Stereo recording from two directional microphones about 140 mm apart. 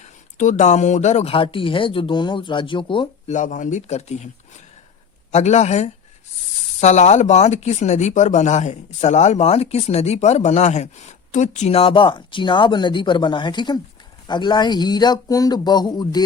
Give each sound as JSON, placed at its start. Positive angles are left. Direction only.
{"t": 0.0, "sound": "speech", "side_deg": 60}
{"t": 3.2, "sound": "speech", "side_deg": 65}
{"t": 5.3, "sound": "speech", "side_deg": 55}